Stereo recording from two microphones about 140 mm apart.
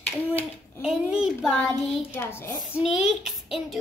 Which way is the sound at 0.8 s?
5° right (ahead or behind).